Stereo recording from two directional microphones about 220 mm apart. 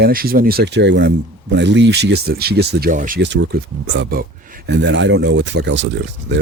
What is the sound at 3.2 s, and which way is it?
Speech, 55° right (ahead or behind).